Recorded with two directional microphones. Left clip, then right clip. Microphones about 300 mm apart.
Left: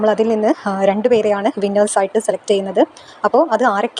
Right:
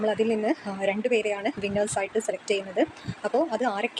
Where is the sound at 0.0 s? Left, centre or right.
Centre.